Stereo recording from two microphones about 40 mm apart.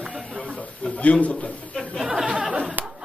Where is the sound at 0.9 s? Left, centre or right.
Left.